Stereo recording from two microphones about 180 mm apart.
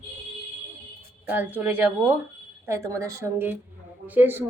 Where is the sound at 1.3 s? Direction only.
10° right (ahead or behind).